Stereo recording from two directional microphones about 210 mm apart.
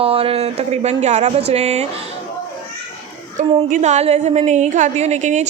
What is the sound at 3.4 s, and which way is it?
A woman's voice, 35° right (ahead or behind).